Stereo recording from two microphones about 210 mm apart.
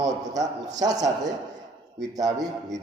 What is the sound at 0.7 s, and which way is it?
Speech, 15° right (ahead or behind).